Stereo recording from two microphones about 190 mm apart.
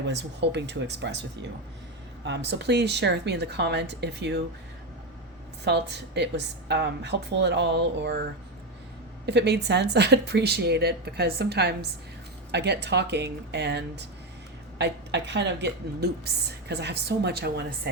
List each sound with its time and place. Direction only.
0.0 s a woman's voice: 65° right (ahead or behind)
5.6 s a woman's voice: 65° right (ahead or behind)
9.2 s a woman's voice: 60° right (ahead or behind)